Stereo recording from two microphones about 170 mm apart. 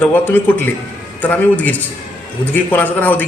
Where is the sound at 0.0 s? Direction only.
10° left (ahead or behind).